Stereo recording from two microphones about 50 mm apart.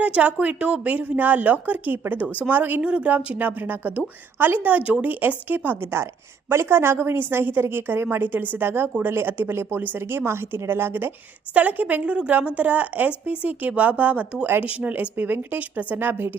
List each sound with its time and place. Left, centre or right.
0.0 s a woman's voice: right
2.9 s speech: right
3.3 s a woman's voice: right
10.0 s a woman's voice: right
11.5 s a woman's voice: right
15.1 s a woman's voice: right